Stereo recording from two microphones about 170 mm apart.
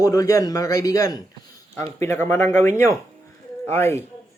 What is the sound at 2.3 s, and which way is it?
Speech, 15° left (ahead or behind).